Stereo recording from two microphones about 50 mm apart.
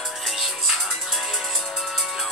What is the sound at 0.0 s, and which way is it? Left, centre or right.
Music, centre.